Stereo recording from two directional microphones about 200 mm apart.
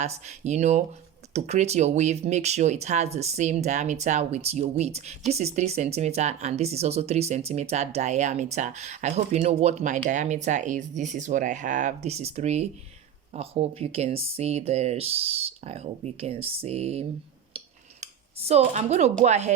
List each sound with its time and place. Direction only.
0.0 s speech: 35° right (ahead or behind)